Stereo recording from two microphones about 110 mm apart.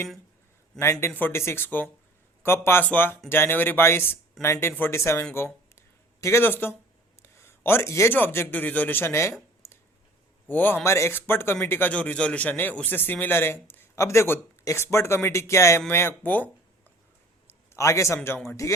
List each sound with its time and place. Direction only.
0.8 s speech: 25° left (ahead or behind)
5.7 s a sound: 25° left (ahead or behind)
7.2 s a man's voice: 25° left (ahead or behind)
9.6 s a sound: 25° left (ahead or behind)
10.5 s speech: 15° left (ahead or behind)
17.7 s speech: 30° left (ahead or behind)